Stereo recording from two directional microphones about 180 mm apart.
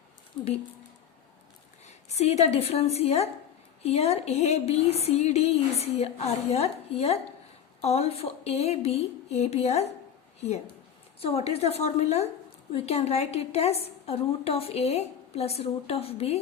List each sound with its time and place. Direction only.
0.4 s speech: 25° left (ahead or behind)
2.0 s a woman's voice: 35° left (ahead or behind)
11.2 s a woman's voice: 35° left (ahead or behind)